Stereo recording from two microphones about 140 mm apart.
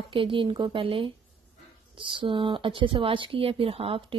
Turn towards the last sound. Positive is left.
turn(degrees=-40)  # may be behind; listen again after turning